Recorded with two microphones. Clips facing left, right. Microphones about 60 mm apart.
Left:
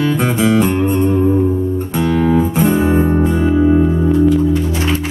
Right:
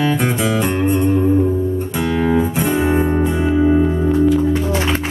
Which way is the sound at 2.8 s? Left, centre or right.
Right.